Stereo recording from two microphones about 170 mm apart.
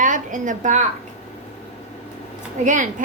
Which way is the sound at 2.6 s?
50° right (ahead or behind).